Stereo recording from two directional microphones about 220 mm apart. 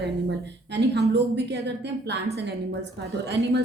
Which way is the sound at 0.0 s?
50° right (ahead or behind).